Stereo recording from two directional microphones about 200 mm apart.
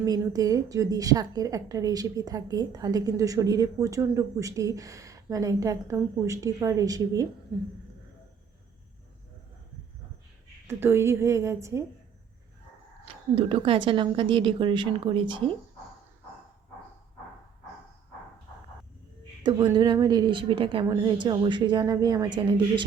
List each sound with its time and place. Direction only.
0.0 s a woman's voice: 20° right (ahead or behind)
10.7 s a woman's voice: 10° right (ahead or behind)
13.3 s a woman's voice: 25° right (ahead or behind)
19.7 s a woman's voice: 20° right (ahead or behind)